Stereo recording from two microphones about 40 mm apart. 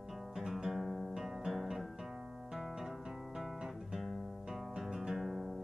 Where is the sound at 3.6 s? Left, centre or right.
Centre.